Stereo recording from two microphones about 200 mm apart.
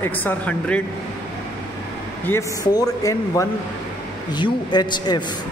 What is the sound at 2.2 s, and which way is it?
A man's voice, 15° left (ahead or behind).